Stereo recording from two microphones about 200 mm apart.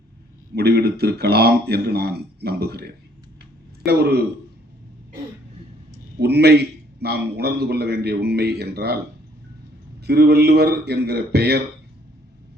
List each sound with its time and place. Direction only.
0.5 s a man's voice: 55° right (ahead or behind)
6.1 s a man's voice: 55° right (ahead or behind)
10.0 s a man's voice: 55° right (ahead or behind)